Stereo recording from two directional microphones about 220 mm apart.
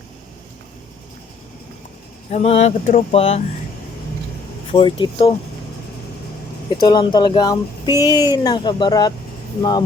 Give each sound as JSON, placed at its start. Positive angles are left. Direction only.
{"t": 2.3, "sound": "speech", "side_deg": 30}
{"t": 4.7, "sound": "speech", "side_deg": 25}
{"t": 6.7, "sound": "speech", "side_deg": 20}